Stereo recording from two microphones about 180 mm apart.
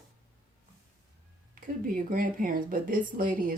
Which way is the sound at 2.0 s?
50° right (ahead or behind).